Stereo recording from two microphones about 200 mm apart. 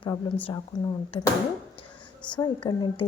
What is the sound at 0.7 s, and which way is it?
Speech, 20° left (ahead or behind).